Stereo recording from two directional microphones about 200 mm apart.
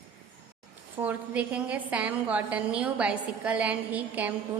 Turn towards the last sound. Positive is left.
turn(degrees=-10)  # may be behind; listen again after turning